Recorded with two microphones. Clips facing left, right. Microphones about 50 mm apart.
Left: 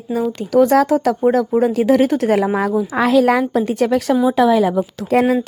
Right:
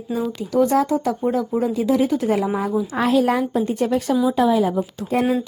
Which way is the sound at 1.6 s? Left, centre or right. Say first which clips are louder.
Left 4 dB; left.